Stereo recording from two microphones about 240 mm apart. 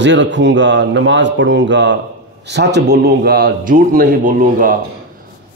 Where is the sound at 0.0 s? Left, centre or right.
Right.